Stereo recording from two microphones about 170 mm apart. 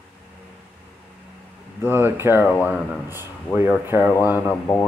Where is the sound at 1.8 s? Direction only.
15° right (ahead or behind).